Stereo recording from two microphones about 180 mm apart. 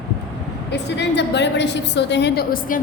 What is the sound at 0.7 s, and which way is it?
A woman's voice, 70° left (ahead or behind).